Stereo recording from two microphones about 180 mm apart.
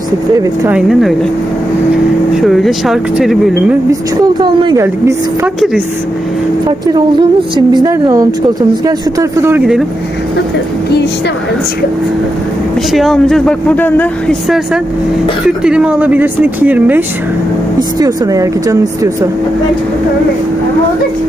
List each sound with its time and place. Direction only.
0.7 s speech: 5° right (ahead or behind)
2.4 s speech: centre (ahead or behind)
4.2 s speech: 25° right (ahead or behind)
4.8 s speech: 15° right (ahead or behind)
5.5 s speech: 5° right (ahead or behind)
6.7 s speech: 25° right (ahead or behind); by 9.8 s 5° right (ahead or behind)
12.9 s speech: centre (ahead or behind)
15.4 s speech: 5° right (ahead or behind)
17.7 s speech: 20° right (ahead or behind)